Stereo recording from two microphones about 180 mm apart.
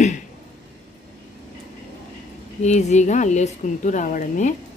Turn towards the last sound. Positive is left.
turn(degrees=45)  # may be behind; listen again after turning